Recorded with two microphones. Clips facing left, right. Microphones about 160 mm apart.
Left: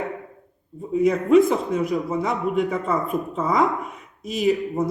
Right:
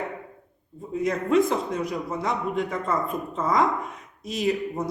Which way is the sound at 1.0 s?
5° left (ahead or behind).